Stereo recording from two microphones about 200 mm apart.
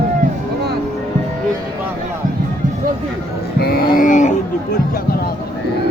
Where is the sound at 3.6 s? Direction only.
50° left (ahead or behind).